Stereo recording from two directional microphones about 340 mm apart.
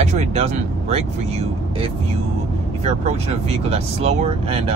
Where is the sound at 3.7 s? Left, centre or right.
Centre.